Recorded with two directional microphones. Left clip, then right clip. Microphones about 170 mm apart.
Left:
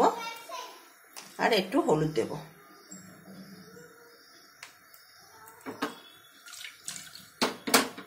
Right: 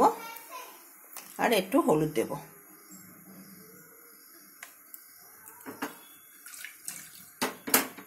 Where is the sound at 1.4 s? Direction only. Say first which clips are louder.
Even; 45° right (ahead or behind).